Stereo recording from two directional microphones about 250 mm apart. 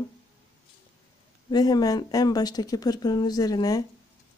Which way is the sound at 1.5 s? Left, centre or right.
Centre.